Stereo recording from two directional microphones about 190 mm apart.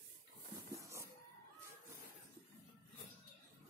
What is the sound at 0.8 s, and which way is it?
Music, 15° right (ahead or behind).